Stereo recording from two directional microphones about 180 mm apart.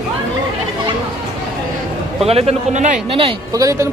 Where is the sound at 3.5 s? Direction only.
20° right (ahead or behind).